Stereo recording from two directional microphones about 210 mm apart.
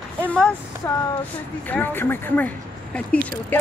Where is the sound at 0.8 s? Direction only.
15° left (ahead or behind).